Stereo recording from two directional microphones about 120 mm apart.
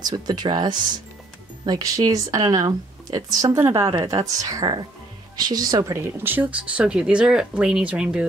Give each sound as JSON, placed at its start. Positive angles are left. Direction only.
{"t": 0.0, "sound": "a woman's voice", "side_deg": -35}